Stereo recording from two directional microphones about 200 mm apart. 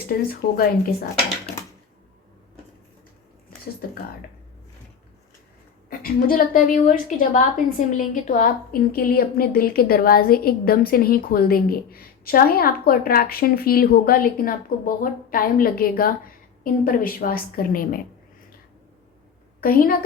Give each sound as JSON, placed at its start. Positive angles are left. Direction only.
{"t": 0.1, "sound": "a woman's voice", "side_deg": 50}
{"t": 5.9, "sound": "a woman's voice", "side_deg": 45}
{"t": 19.6, "sound": "a woman's voice", "side_deg": 45}